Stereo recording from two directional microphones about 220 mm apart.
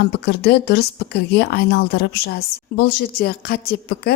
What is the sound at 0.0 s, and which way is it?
A woman's voice, 45° left (ahead or behind).